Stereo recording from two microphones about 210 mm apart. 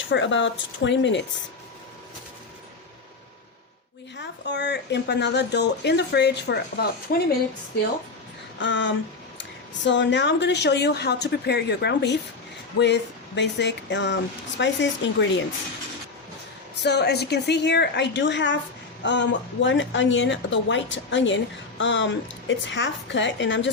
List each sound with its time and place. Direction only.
0.0 s speech: 60° left (ahead or behind)
4.2 s a woman's voice: 55° left (ahead or behind)
8.5 s speech: 60° left (ahead or behind)
16.8 s a woman's voice: 50° left (ahead or behind)